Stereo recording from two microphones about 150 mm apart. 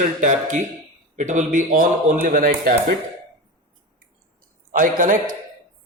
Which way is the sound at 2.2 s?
70° right (ahead or behind).